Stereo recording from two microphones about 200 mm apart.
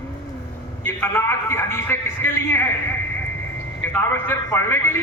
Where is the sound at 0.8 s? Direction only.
10° left (ahead or behind).